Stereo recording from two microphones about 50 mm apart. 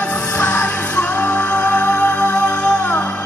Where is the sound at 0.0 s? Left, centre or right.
Left.